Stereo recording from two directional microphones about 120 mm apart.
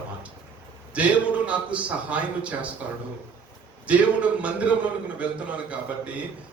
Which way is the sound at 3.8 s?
10° right (ahead or behind).